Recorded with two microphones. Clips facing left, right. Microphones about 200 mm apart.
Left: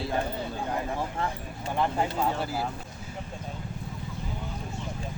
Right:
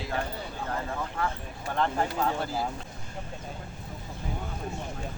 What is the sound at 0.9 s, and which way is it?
Speech, 25° left (ahead or behind).